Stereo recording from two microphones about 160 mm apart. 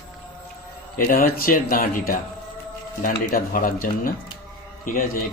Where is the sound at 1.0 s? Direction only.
60° left (ahead or behind).